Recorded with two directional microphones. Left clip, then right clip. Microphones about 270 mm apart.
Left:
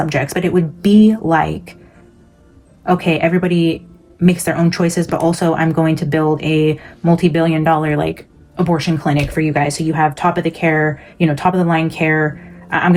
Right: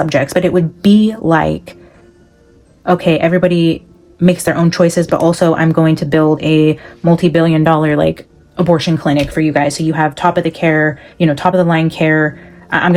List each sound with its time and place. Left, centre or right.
0.0 s speech: right
2.8 s speech: right